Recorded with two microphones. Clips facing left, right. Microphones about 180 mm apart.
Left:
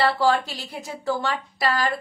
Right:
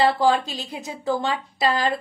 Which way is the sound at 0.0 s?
15° right (ahead or behind).